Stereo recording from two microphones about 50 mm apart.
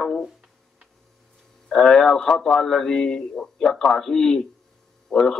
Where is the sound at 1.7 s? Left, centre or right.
Centre.